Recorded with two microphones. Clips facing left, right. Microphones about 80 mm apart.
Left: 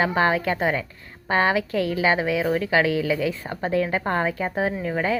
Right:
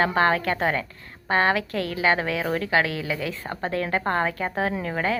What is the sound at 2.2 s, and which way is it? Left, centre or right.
Speech, right.